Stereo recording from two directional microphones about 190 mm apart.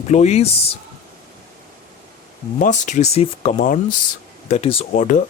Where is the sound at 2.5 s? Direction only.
40° left (ahead or behind).